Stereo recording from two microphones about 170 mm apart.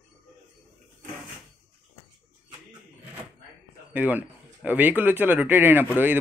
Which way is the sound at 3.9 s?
10° right (ahead or behind).